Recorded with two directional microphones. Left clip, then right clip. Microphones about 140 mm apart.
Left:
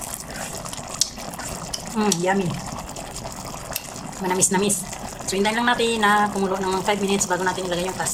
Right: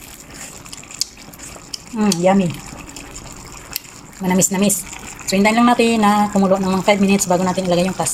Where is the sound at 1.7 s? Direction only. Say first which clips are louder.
Right 3 dB; 10° right (ahead or behind).